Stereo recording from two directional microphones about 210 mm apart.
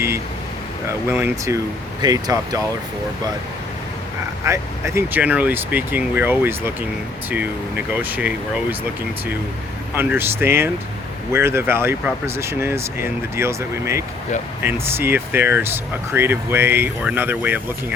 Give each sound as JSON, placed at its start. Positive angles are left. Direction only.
{"t": 0.9, "sound": "speech", "side_deg": -10}
{"t": 4.4, "sound": "speech", "side_deg": -15}
{"t": 9.9, "sound": "speech", "side_deg": -10}